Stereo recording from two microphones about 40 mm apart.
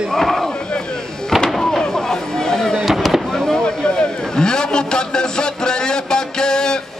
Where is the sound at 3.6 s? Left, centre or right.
Left.